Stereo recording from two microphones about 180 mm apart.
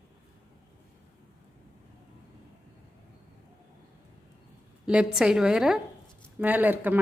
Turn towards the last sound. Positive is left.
turn(degrees=-10)  # may be behind; listen again after turning